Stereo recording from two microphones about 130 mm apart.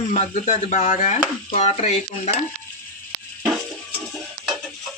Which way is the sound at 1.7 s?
50° left (ahead or behind).